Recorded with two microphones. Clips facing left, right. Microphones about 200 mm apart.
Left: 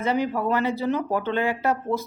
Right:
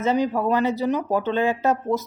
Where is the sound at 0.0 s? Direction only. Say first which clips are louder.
Right 3 dB; 15° right (ahead or behind).